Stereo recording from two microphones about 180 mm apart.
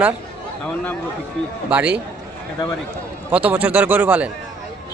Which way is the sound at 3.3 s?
10° right (ahead or behind).